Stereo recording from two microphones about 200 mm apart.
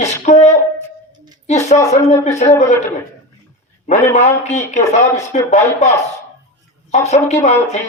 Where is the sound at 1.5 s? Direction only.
35° left (ahead or behind).